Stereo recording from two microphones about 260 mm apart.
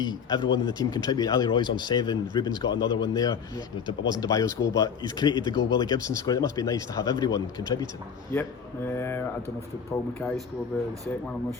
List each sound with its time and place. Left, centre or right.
0.0 s speech: centre
9.0 s speech: centre